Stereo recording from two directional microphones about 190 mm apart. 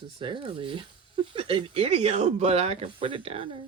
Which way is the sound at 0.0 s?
25° right (ahead or behind).